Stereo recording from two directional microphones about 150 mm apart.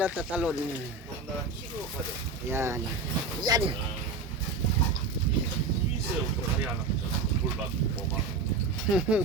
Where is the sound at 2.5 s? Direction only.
15° right (ahead or behind).